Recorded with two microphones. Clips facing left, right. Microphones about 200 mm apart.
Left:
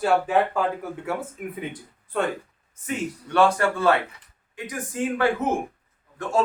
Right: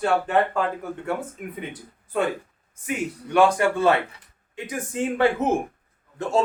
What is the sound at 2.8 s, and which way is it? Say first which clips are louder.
A man's voice: right 1 dB; 15° right (ahead or behind).